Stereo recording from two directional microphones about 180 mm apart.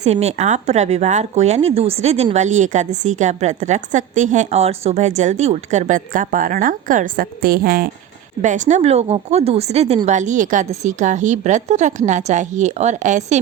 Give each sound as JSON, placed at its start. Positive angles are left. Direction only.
{"t": 0.0, "sound": "speech", "side_deg": -35}
{"t": 8.4, "sound": "speech", "side_deg": -45}